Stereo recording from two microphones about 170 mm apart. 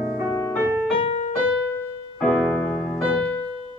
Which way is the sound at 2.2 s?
5° left (ahead or behind).